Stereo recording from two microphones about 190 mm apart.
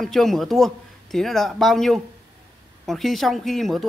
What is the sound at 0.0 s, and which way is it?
Speech, centre (ahead or behind).